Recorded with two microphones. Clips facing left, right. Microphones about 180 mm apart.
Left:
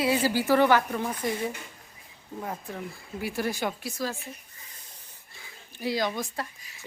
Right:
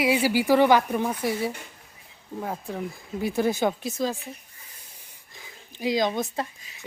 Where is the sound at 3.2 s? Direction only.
20° right (ahead or behind).